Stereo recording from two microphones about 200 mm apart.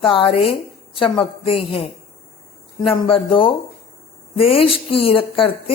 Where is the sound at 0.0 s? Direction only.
25° left (ahead or behind).